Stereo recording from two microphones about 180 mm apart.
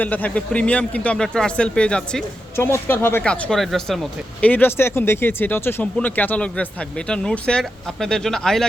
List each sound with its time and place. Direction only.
0.0 s speech: 10° left (ahead or behind)